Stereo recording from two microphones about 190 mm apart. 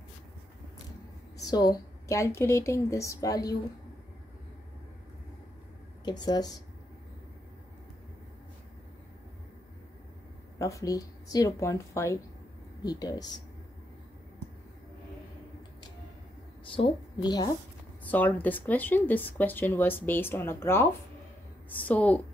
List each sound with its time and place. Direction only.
1.4 s speech: 20° left (ahead or behind)
6.0 s speech: 20° left (ahead or behind)
10.6 s speech: 15° left (ahead or behind)
16.7 s a woman's voice: 25° left (ahead or behind)
18.0 s speech: 10° left (ahead or behind)